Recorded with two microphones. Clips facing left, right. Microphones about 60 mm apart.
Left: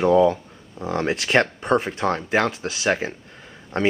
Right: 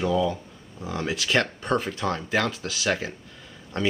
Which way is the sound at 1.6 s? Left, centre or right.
Left.